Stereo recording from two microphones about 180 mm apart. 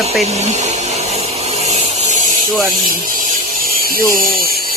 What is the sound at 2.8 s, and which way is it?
Electric toothbrush, 50° right (ahead or behind).